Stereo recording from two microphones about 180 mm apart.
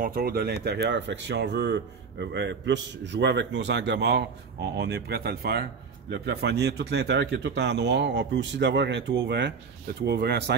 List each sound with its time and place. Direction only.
0.0 s speech: 55° right (ahead or behind)